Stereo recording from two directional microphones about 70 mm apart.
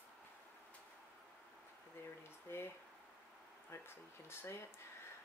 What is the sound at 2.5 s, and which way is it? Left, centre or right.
Speech, left.